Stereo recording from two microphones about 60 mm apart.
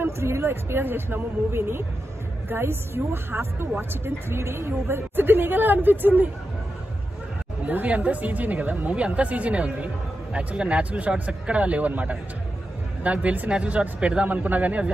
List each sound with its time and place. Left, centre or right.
0.0 s a woman's voice: right
7.6 s speech: right